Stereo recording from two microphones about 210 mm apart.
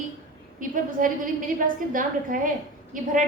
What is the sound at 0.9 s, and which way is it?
A woman's voice, 40° right (ahead or behind).